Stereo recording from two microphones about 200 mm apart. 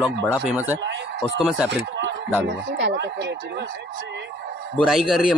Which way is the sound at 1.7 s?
60° right (ahead or behind).